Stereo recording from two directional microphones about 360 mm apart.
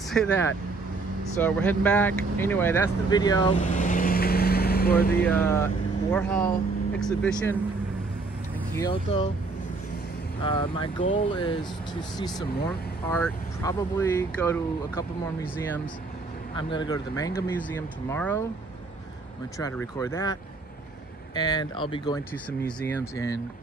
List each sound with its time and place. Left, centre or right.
0.1 s speech: centre; by 5.2 s left
5.2 s speech: centre
8.7 s speech: centre
10.4 s speech: centre
12.6 s speech: centre
19.6 s speech: centre
21.4 s speech: centre